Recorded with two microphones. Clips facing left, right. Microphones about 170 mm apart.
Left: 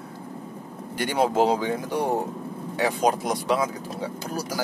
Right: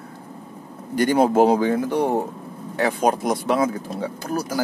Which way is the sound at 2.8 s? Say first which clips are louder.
Right 3 dB; 55° right (ahead or behind).